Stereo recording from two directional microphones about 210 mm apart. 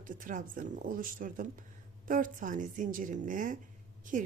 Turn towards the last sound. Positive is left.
turn(degrees=-40)  # may be behind; listen again after turning